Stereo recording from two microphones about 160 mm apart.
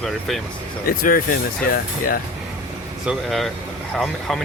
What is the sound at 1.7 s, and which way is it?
Speech, 65° left (ahead or behind).